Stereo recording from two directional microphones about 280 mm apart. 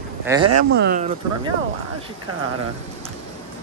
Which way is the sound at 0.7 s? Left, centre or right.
Right.